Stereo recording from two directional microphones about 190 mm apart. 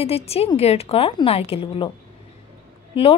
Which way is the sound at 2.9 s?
30° left (ahead or behind).